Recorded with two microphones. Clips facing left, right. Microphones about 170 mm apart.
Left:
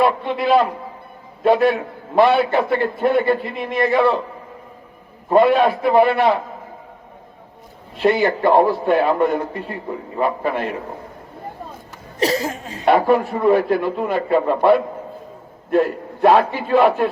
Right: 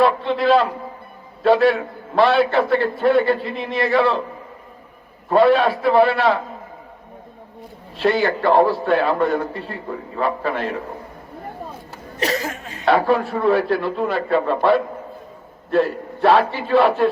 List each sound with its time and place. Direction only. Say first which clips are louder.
0.0 s a man's voice: right 1 dB; 15° left (ahead or behind)
3.2 s a man's voice: left 1 dB; 55° left (ahead or behind)
3.7 s a man's voice: left 2 dB; 20° left (ahead or behind)
5.3 s a man's voice: left 1 dB; 15° left (ahead or behind)
7.9 s a man's voice: left 2 dB; 20° left (ahead or behind)
12.2 s a sound: left 3 dB; 30° left (ahead or behind)
12.8 s a man's voice: left 2 dB; 15° left (ahead or behind)
16.2 s a man's voice: left 2 dB; 15° left (ahead or behind)